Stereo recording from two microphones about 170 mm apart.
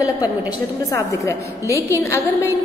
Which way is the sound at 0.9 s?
20° left (ahead or behind).